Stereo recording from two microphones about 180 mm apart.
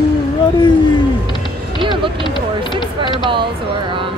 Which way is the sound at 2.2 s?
25° left (ahead or behind).